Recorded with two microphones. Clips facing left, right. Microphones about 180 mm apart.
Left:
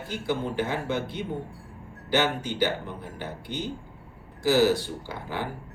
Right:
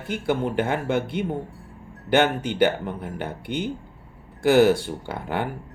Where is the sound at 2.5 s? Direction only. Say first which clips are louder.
Right 6 dB; 60° right (ahead or behind).